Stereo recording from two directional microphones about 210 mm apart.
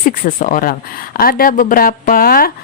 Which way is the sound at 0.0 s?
40° left (ahead or behind).